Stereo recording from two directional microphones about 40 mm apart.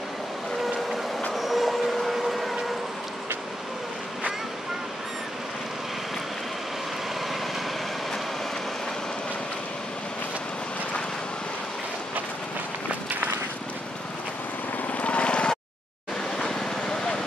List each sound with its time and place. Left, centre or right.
1.3 s train: centre
14.9 s vehicle: left
16.3 s vehicle: centre